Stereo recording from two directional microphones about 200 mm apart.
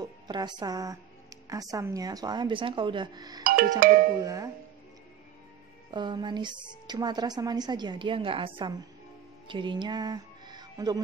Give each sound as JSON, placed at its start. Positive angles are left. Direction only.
{"t": 0.0, "sound": "speech", "side_deg": -20}
{"t": 3.8, "sound": "speech", "side_deg": -50}
{"t": 4.2, "sound": "speech", "side_deg": -15}
{"t": 5.9, "sound": "a woman's voice", "side_deg": -20}